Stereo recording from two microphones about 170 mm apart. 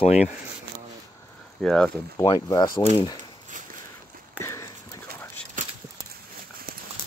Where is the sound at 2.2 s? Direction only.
25° left (ahead or behind).